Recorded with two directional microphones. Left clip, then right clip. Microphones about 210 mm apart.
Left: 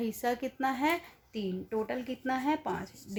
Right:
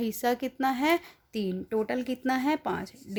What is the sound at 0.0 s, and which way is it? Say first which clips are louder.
A woman's voice: right 4 dB; 40° right (ahead or behind).